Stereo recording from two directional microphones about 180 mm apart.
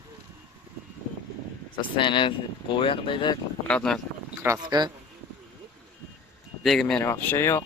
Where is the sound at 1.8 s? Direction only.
25° left (ahead or behind).